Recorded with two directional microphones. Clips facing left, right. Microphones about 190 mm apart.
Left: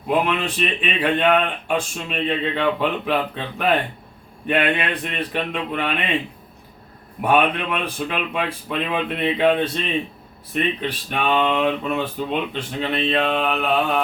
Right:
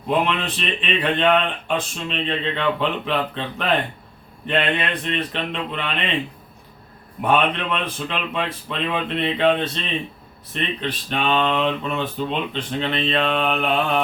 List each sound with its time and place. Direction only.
0.1 s speech: 10° left (ahead or behind)
7.2 s speech: 10° left (ahead or behind)